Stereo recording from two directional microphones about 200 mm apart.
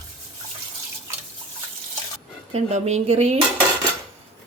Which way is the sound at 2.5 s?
35° right (ahead or behind).